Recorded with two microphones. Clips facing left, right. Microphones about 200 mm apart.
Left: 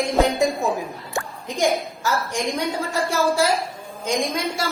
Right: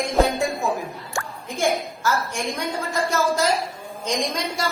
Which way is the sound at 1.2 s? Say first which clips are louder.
Left 3 dB; 15° left (ahead or behind).